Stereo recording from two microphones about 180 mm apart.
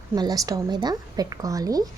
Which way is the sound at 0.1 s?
20° right (ahead or behind).